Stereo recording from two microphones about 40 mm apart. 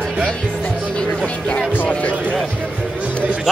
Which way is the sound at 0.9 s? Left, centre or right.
Left.